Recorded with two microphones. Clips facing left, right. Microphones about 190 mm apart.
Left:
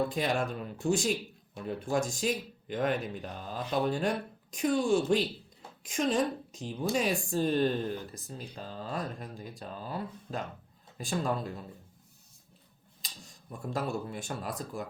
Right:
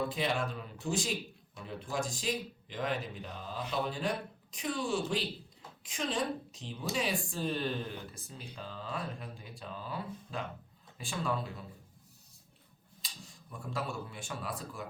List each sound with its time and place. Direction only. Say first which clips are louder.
0.2 s a woman's voice: left 3 dB; 45° left (ahead or behind)
13.5 s a woman's voice: left 5 dB; 45° left (ahead or behind)